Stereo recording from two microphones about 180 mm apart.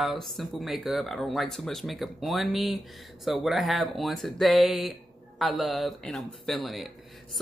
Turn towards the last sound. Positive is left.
turn(degrees=0)  # may be behind; listen again after turning